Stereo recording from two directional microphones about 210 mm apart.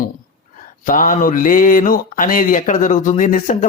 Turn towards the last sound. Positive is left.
turn(degrees=40)  # may be behind; listen again after turning